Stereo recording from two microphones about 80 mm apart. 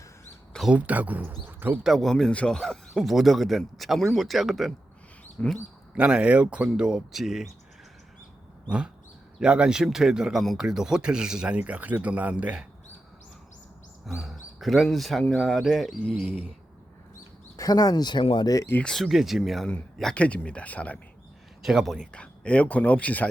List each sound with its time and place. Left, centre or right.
0.7 s speech: centre
1.8 s speech: centre
3.0 s speech: centre
5.4 s speech: centre
5.9 s speech: centre
9.4 s speech: centre
14.1 s speech: centre
17.6 s speech: left
18.9 s speech: centre
21.6 s speech: centre
21.9 s speech: centre